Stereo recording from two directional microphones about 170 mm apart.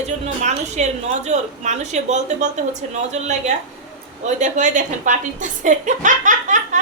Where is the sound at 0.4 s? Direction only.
40° right (ahead or behind).